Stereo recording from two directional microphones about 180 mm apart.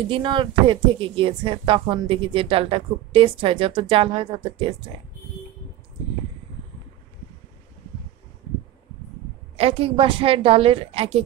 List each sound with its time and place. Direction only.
0.1 s speech: 25° right (ahead or behind)
9.6 s a woman's voice: 30° right (ahead or behind)